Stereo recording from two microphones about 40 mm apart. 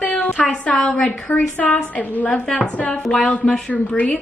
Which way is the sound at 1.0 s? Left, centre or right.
Left.